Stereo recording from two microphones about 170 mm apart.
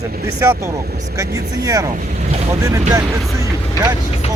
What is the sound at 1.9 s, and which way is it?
Speech, 45° right (ahead or behind).